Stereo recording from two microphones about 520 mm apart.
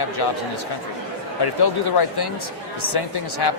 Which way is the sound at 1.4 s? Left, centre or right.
Left.